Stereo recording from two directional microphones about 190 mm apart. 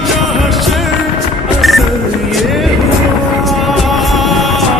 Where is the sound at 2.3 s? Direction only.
Centre (ahead or behind).